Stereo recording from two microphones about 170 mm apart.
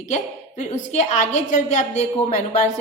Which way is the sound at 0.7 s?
45° left (ahead or behind).